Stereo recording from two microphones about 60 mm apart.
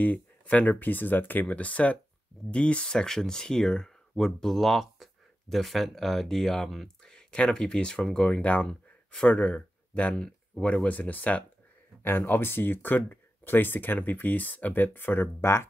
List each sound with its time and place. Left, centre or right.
0.0 s speech: left